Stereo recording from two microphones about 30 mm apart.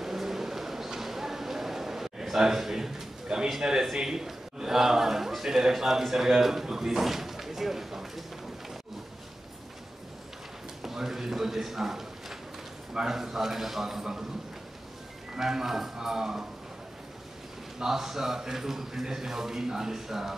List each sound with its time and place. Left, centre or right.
0.0 s a sound: centre
3.3 s a man's voice: centre
10.8 s a sound: centre
12.9 s a man's voice: centre
15.3 s a man's voice: centre
17.7 s a man's voice: centre